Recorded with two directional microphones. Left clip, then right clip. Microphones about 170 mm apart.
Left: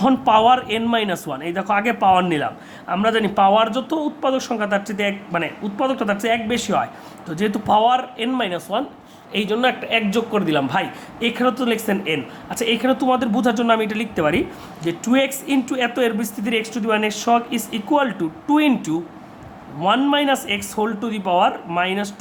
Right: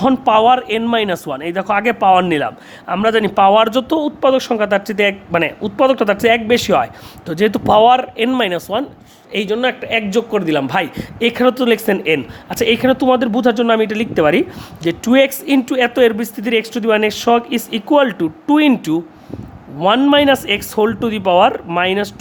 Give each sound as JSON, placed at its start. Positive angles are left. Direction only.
{"t": 0.0, "sound": "speech", "side_deg": -40}